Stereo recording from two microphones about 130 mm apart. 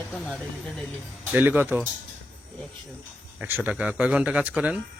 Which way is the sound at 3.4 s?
15° right (ahead or behind).